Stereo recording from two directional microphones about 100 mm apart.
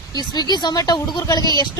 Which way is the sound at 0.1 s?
40° left (ahead or behind).